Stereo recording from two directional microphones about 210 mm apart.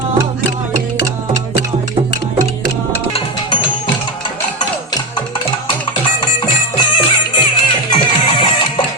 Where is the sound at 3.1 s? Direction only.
25° left (ahead or behind).